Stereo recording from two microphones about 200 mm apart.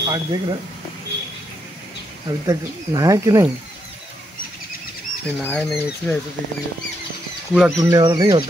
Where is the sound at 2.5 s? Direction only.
15° right (ahead or behind).